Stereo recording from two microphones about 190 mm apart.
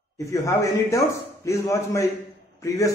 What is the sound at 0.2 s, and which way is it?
A man's voice, 15° left (ahead or behind).